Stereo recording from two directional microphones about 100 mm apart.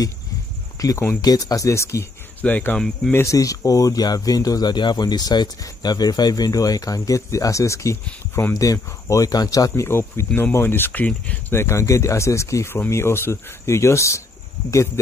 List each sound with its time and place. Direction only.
0.7 s speech: 35° left (ahead or behind)
2.4 s speech: 15° left (ahead or behind)
3.1 s speech: 30° left (ahead or behind)
9.8 s speech: 25° left (ahead or behind)
11.6 s speech: 30° left (ahead or behind)